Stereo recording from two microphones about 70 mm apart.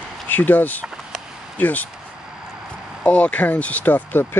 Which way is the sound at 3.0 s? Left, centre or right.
Centre.